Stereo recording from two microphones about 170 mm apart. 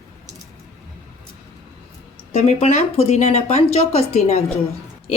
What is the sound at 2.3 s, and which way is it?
A woman's voice, 40° left (ahead or behind).